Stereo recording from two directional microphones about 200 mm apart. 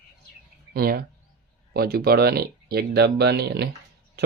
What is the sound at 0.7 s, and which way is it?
Speech, 50° right (ahead or behind).